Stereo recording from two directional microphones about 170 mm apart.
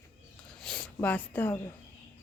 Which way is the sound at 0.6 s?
5° left (ahead or behind).